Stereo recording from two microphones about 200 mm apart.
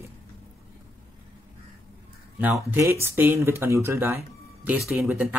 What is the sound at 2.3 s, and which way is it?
Speech, 10° right (ahead or behind).